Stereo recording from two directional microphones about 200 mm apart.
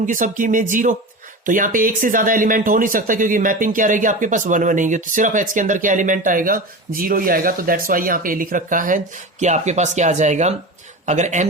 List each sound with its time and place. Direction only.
0.0 s a man's voice: 40° right (ahead or behind)